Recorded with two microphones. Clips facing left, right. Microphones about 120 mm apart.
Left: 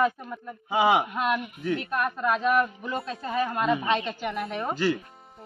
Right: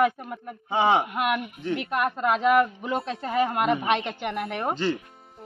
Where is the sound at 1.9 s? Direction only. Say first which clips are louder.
Right 2 dB; 20° right (ahead or behind).